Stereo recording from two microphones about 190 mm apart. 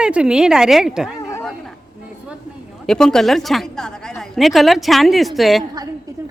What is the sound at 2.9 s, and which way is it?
A woman's voice, 5° left (ahead or behind).